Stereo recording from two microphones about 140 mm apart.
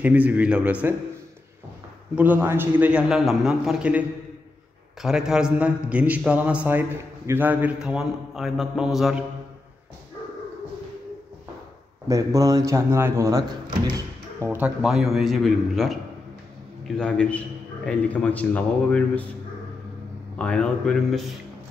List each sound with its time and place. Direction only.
0.0 s a man's voice: 10° right (ahead or behind)
2.1 s a man's voice: 10° right (ahead or behind)
5.0 s a man's voice: 5° right (ahead or behind)
12.1 s speech: 25° right (ahead or behind)
14.4 s a man's voice: 15° right (ahead or behind)
14.8 s a man's voice: 5° right (ahead or behind)
20.3 s a man's voice: 10° left (ahead or behind)